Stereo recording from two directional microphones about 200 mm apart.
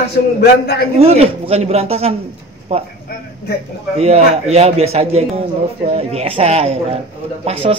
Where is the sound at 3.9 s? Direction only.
30° right (ahead or behind).